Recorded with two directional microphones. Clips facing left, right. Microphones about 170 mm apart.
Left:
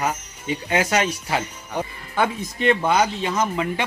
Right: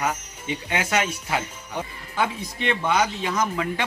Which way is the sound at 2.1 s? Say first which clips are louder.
Left 3 dB; 45° left (ahead or behind).